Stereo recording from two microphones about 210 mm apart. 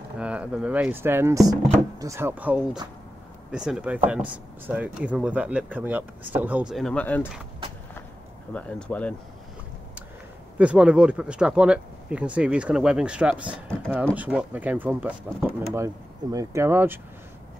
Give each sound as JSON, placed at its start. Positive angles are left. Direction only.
{"t": 0.2, "sound": "speech", "side_deg": -5}
{"t": 8.5, "sound": "speech", "side_deg": 5}
{"t": 10.6, "sound": "speech", "side_deg": -5}